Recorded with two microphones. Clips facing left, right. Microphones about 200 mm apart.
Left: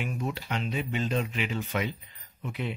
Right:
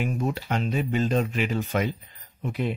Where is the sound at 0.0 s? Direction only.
45° right (ahead or behind).